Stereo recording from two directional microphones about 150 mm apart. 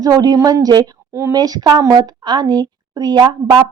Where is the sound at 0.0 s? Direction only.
25° right (ahead or behind).